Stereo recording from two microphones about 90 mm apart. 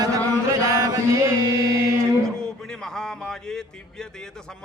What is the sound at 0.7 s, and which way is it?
Chant, 40° right (ahead or behind).